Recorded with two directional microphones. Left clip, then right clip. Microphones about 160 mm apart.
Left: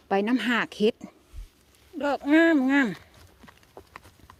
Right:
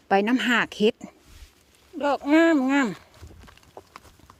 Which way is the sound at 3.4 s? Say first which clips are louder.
Right 2 dB; 15° right (ahead or behind).